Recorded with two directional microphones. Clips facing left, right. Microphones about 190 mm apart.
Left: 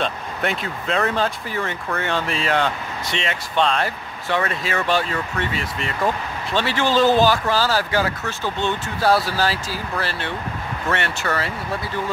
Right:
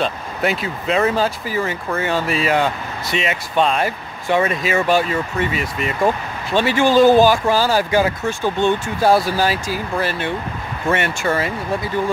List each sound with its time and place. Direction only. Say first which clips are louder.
0.0 s speech: right 3 dB; 5° right (ahead or behind)